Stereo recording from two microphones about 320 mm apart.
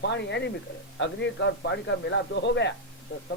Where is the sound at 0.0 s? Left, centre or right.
Left.